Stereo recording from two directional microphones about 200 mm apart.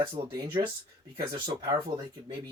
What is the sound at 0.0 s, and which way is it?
Speech, 20° right (ahead or behind).